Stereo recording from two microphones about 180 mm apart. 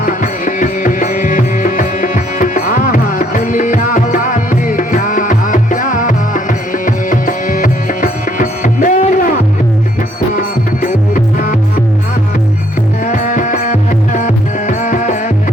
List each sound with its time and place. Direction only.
0.0 s music: 45° left (ahead or behind)
10.8 s music: 50° left (ahead or behind)
13.1 s music: 45° left (ahead or behind)